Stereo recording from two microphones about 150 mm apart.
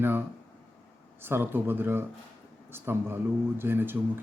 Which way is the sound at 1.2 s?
15° right (ahead or behind).